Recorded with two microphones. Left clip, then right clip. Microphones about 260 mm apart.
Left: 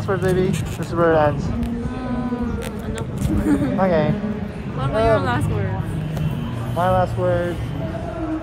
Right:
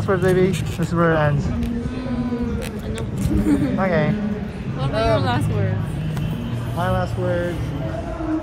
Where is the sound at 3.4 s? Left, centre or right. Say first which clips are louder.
Left 2 dB; centre.